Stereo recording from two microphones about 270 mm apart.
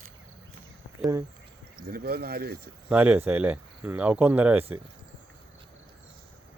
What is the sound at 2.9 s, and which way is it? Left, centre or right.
Speech, centre.